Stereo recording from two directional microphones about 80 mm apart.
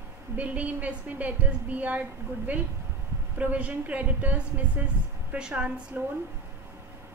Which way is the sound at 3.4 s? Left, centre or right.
Centre.